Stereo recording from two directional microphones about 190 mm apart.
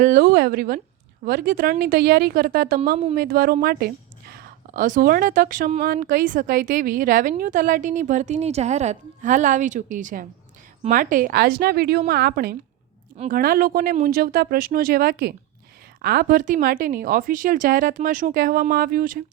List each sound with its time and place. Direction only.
0.0 s a sound: 45° right (ahead or behind)
0.3 s a woman's voice: 60° right (ahead or behind)
13.1 s a woman's voice: 45° right (ahead or behind)